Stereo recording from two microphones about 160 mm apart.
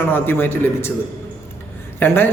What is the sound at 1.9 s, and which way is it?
Speech, 10° left (ahead or behind).